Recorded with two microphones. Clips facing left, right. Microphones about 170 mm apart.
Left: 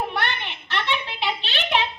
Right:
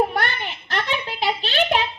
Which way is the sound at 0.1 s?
40° right (ahead or behind).